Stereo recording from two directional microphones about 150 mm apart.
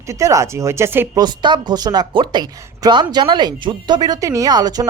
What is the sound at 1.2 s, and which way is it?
Speech, 30° right (ahead or behind).